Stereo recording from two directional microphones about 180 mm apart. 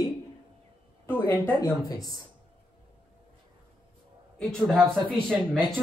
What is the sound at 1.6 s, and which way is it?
Speech, 20° left (ahead or behind).